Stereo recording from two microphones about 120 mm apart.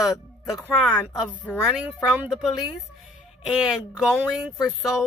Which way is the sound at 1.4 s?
10° right (ahead or behind).